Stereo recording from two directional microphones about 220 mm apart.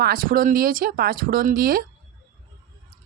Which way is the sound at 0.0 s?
40° right (ahead or behind).